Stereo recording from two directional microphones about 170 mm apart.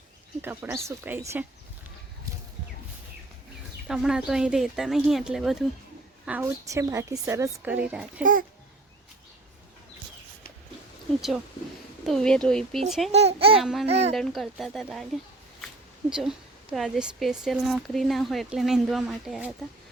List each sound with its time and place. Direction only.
0.4 s a woman's voice: 15° right (ahead or behind)
3.8 s speech: 5° right (ahead or behind)
6.2 s a woman's voice: 15° right (ahead or behind)
8.2 s speech: 50° right (ahead or behind)
12.0 s speech: 5° left (ahead or behind)
13.1 s a child's voice: 40° right (ahead or behind)
13.6 s speech: centre (ahead or behind)
13.8 s a child's voice: 40° right (ahead or behind)
14.1 s speech: centre (ahead or behind)
16.0 s speech: 5° right (ahead or behind)